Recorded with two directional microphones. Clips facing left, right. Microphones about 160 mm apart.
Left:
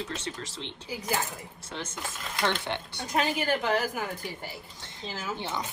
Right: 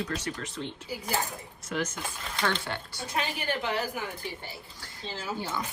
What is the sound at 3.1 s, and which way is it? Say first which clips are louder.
Speech: left 5 dB; 40° left (ahead or behind).